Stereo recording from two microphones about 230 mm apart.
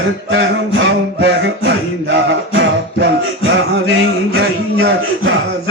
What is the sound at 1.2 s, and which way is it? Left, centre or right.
Music, right.